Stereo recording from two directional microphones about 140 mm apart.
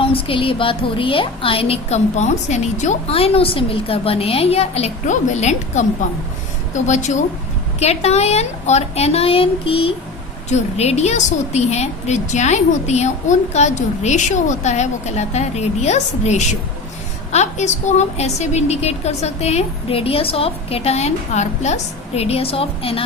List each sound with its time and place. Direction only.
0.0 s a woman's voice: 40° left (ahead or behind)